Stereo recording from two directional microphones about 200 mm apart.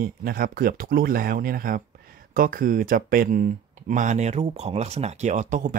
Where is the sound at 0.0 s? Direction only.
45° right (ahead or behind).